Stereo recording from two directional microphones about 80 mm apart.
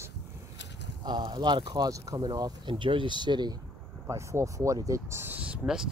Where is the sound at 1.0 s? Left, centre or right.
Right.